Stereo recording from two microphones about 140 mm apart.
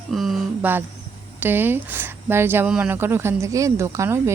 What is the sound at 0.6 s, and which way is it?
Speech, 15° right (ahead or behind).